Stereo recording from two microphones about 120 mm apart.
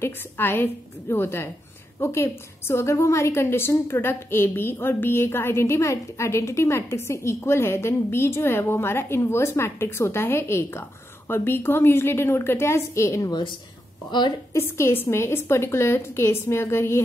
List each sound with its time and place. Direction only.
0.0 s a woman's voice: 20° left (ahead or behind)
14.5 s a woman's voice: 20° left (ahead or behind)